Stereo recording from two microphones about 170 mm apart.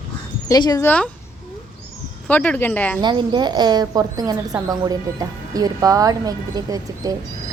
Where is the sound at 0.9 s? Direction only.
10° left (ahead or behind).